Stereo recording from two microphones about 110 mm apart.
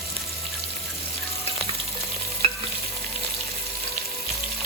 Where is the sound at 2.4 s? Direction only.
60° right (ahead or behind).